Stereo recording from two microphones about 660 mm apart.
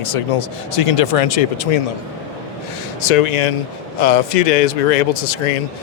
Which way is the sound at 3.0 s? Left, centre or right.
Left.